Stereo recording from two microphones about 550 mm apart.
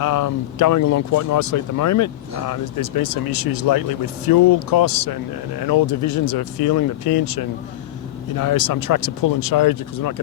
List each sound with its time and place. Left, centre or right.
0.0 s speech: left